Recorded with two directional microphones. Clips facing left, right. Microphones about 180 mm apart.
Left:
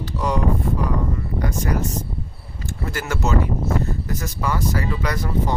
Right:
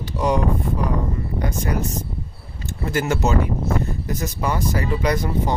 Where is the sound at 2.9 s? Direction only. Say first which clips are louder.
Right 3 dB; 20° right (ahead or behind).